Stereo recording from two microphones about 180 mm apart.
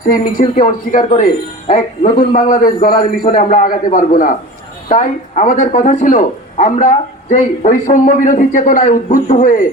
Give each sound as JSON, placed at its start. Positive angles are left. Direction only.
{"t": 0.1, "sound": "speech", "side_deg": 45}